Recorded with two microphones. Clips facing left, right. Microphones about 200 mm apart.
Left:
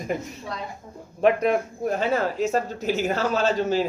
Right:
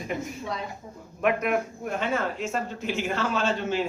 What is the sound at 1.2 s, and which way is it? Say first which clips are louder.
Speech: left 4 dB; 30° left (ahead or behind).